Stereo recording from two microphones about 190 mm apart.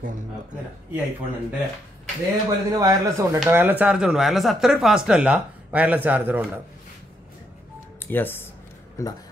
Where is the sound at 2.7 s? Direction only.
20° right (ahead or behind).